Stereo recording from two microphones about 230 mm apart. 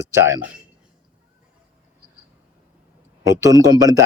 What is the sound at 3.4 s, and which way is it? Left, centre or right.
Speech, centre.